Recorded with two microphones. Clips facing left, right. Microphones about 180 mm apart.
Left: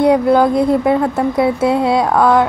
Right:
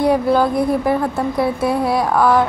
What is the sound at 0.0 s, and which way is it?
Speech, 20° left (ahead or behind).